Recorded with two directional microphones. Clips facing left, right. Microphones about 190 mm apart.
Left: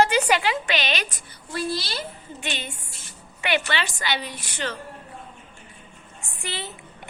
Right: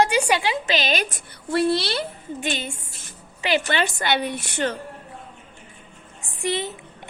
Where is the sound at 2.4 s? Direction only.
45° right (ahead or behind).